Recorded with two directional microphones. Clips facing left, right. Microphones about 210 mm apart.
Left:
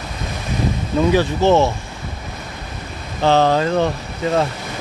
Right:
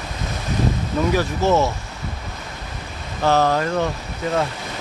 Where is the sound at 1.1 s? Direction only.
25° left (ahead or behind).